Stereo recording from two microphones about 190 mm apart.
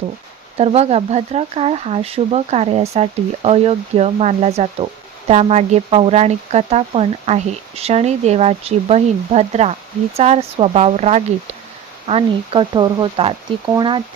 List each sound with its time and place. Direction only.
0.5 s speech: 30° right (ahead or behind)